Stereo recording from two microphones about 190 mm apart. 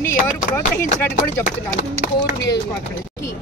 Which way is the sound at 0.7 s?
10° left (ahead or behind).